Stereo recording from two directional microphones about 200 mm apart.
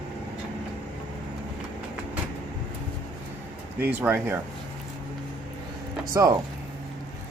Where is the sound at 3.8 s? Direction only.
10° right (ahead or behind).